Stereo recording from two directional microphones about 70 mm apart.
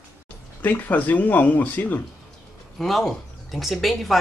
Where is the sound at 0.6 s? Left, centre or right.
Left.